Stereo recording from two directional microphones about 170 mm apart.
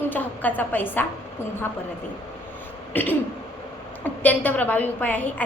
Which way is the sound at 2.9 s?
10° left (ahead or behind).